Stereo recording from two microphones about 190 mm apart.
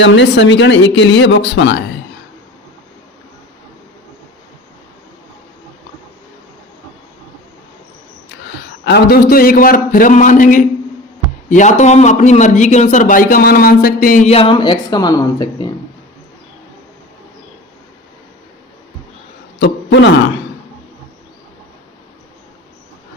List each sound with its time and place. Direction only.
0.0 s speech: 70° left (ahead or behind)
8.8 s a man's voice: 60° left (ahead or behind); by 15.7 s 20° left (ahead or behind)
19.5 s a sound: 65° left (ahead or behind)